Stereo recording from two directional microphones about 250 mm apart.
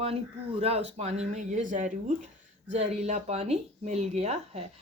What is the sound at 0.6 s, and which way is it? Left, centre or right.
Speech, right.